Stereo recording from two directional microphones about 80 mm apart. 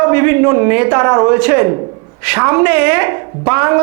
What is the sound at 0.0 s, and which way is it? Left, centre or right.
A woman's voice, right.